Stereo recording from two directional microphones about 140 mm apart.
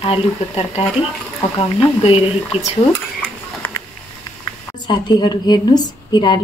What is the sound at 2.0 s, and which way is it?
Speech, 40° left (ahead or behind).